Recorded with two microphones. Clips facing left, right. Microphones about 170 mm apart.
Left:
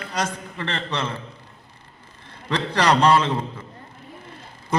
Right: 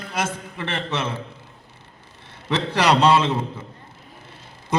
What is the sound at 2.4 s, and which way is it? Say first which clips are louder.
Speech: right 1 dB; 10° right (ahead or behind).